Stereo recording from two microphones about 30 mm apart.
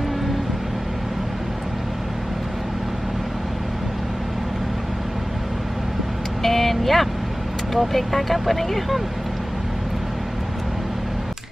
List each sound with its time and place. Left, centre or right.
6.4 s vehicle: centre
7.9 s speech: centre